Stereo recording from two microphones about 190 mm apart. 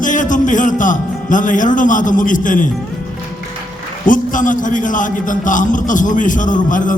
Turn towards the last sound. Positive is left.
turn(degrees=45)  # may be behind; listen again after turning